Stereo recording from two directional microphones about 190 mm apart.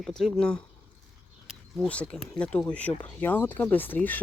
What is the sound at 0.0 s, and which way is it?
Speech, centre (ahead or behind).